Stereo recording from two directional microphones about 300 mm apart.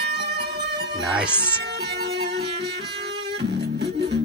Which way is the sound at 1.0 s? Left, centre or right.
Centre.